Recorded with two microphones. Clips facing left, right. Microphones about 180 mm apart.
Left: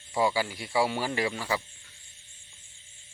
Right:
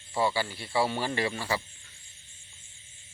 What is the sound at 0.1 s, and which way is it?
Speech, 10° left (ahead or behind).